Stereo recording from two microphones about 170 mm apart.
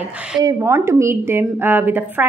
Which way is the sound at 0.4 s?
15° right (ahead or behind).